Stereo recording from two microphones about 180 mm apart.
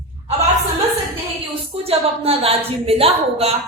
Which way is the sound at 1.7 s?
30° right (ahead or behind).